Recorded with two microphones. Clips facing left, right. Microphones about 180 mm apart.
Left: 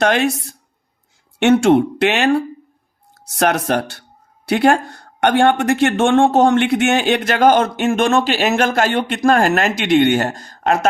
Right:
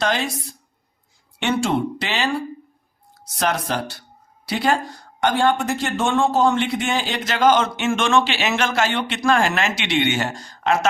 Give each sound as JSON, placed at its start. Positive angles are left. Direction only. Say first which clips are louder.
{"t": 0.0, "sound": "speech", "louder": "left 7 dB", "side_deg": 65}